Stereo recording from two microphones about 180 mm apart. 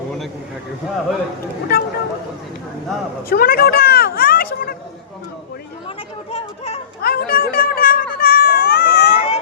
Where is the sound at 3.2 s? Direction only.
55° left (ahead or behind).